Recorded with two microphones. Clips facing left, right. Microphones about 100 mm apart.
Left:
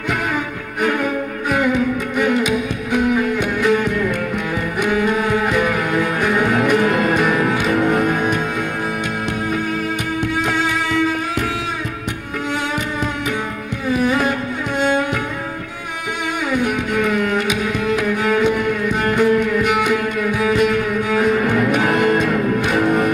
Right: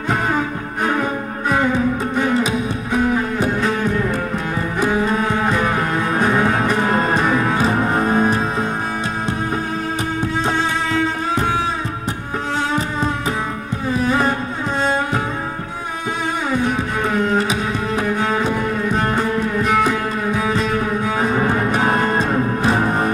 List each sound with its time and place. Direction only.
0.8 s music: 30° right (ahead or behind)
10.2 s music: 30° right (ahead or behind)
13.8 s music: 30° right (ahead or behind)
16.4 s music: 30° right (ahead or behind)